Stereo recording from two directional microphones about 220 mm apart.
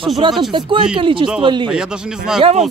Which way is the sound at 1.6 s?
5° right (ahead or behind).